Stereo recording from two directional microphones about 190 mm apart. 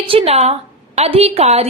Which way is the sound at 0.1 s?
30° right (ahead or behind).